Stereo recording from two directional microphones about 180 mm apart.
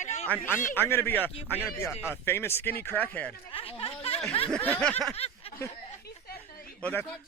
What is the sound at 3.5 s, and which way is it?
Speech, 30° left (ahead or behind).